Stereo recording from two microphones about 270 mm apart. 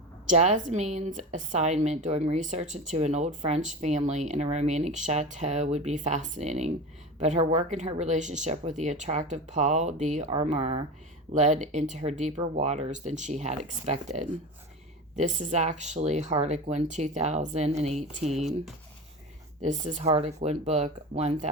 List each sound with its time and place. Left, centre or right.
0.3 s a woman's voice: right
19.6 s a woman's voice: right